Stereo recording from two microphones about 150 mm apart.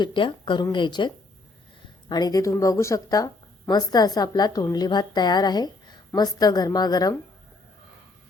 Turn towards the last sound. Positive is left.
turn(degrees=25)  # may be behind; listen again after turning